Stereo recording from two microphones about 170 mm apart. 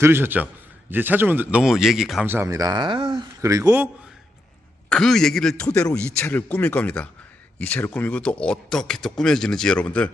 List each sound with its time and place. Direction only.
0.0 s speech: 15° right (ahead or behind)
2.2 s speech: 15° right (ahead or behind); by 3.2 s 30° right (ahead or behind)
3.4 s speech: 20° right (ahead or behind)
4.9 s a man's voice: 5° left (ahead or behind)